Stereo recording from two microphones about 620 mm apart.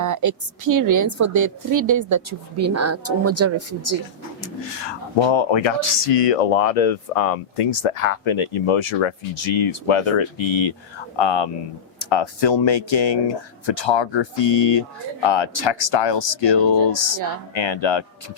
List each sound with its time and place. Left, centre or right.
0.0 s a woman's voice: right
4.4 s speech: left
10.5 s speech: left